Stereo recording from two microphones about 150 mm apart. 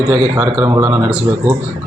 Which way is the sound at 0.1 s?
20° right (ahead or behind).